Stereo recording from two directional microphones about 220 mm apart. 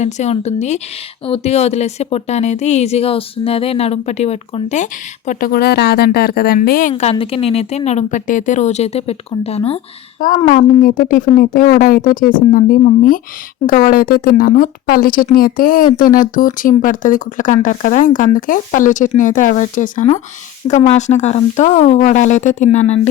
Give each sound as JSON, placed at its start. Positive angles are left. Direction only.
{"t": 0.0, "sound": "speech", "side_deg": 30}
{"t": 6.9, "sound": "a woman's voice", "side_deg": 30}
{"t": 10.2, "sound": "speech", "side_deg": 40}